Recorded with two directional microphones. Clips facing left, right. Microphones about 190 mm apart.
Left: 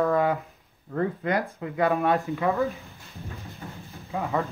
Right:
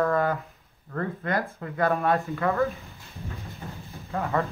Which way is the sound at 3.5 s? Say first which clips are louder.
Right 1 dB; centre (ahead or behind).